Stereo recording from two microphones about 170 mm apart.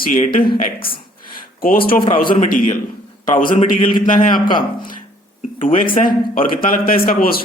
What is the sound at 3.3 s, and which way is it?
Speech, 55° left (ahead or behind).